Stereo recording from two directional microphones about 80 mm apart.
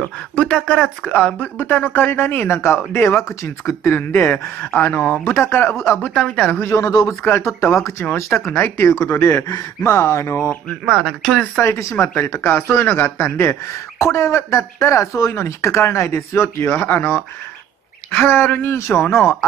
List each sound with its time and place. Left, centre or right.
0.0 s speech: centre; by 5.9 s left
6.0 s speech: centre
6.6 s speech: left
10.9 s speech: centre
11.6 s speech: left
12.4 s speech: left
16.7 s speech: left
18.1 s speech: left